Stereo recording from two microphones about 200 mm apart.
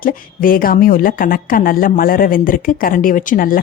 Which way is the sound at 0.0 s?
45° left (ahead or behind).